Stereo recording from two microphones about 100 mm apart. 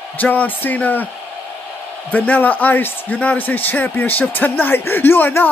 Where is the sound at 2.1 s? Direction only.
15° left (ahead or behind).